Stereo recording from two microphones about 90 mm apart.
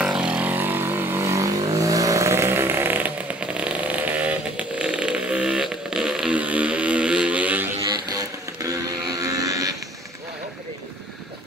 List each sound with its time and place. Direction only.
0.0 s vehicle: 10° right (ahead or behind)
7.9 s music: 45° right (ahead or behind)
9.2 s a sound: 40° right (ahead or behind)